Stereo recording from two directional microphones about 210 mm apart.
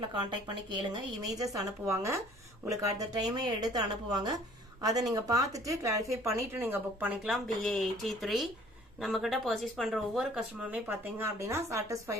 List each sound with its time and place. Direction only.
0.3 s speech: 20° right (ahead or behind)